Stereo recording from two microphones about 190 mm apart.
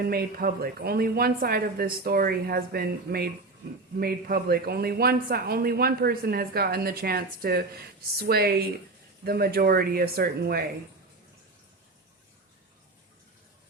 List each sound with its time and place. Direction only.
0.1 s speech: 50° right (ahead or behind)